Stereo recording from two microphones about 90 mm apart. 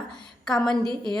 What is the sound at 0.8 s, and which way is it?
Speech, 60° right (ahead or behind).